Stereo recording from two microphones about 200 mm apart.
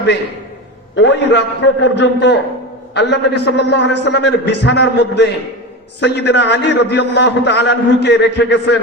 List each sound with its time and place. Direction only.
0.9 s a man's voice: 60° left (ahead or behind)